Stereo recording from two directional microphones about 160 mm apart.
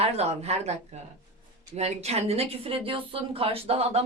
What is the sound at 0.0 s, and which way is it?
Speech, 40° right (ahead or behind).